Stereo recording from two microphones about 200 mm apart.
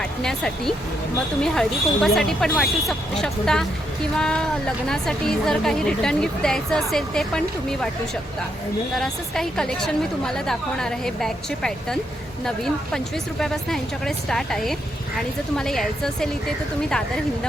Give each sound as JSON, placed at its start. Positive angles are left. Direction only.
{"t": 0.0, "sound": "a woman's voice", "side_deg": 5}
{"t": 9.0, "sound": "a woman's voice", "side_deg": 0}